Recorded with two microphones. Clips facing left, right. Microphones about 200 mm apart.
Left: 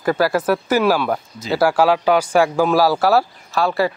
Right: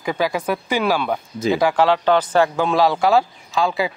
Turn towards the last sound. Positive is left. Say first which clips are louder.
# left 2 dB
turn(degrees=0)  # may be behind; listen again after turning